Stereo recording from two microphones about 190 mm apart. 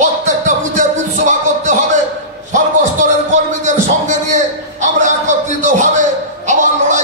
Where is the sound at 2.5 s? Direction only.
40° right (ahead or behind).